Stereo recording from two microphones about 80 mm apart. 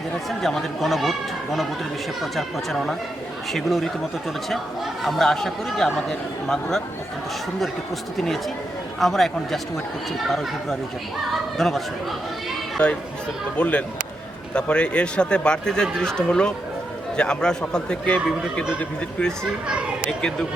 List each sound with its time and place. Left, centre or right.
0.3 s speech: centre
5.0 s speech: centre
9.0 s speech: centre
12.8 s speech: centre
19.6 s a child's voice: centre